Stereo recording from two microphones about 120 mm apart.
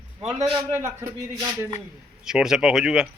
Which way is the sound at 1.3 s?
25° right (ahead or behind).